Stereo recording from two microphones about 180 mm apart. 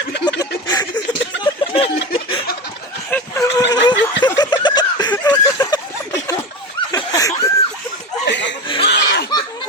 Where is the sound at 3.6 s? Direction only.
80° left.